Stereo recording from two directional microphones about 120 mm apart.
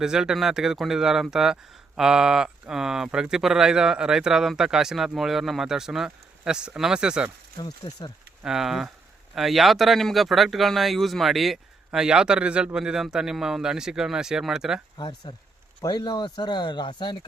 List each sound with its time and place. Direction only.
0.0 s speech: 5° right (ahead or behind)
7.6 s speech: 35° left (ahead or behind)
8.4 s speech: 5° right (ahead or behind)
14.9 s speech: 35° left (ahead or behind)